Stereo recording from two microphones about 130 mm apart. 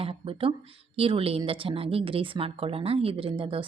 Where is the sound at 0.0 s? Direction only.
45° right (ahead or behind).